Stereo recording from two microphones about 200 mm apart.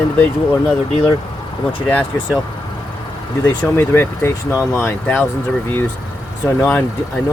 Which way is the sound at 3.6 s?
10° left (ahead or behind).